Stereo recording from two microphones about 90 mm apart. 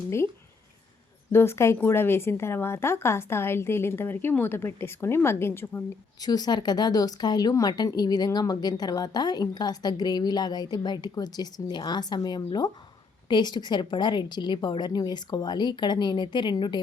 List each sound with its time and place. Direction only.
1.3 s a woman's voice: 30° left (ahead or behind)
6.2 s a woman's voice: 50° left (ahead or behind)